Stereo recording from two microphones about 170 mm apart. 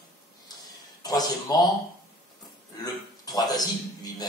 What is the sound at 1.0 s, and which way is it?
Speech, 25° left (ahead or behind).